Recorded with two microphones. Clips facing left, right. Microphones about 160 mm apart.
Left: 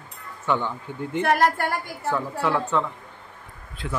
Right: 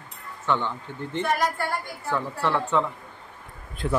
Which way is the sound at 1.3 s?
65° left (ahead or behind).